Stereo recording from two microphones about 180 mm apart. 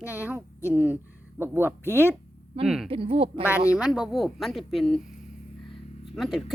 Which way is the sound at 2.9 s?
30° right (ahead or behind).